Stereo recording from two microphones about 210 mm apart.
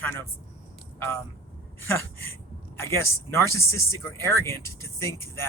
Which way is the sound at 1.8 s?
10° left (ahead or behind).